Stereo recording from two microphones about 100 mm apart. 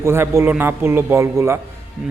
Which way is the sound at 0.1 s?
25° right (ahead or behind).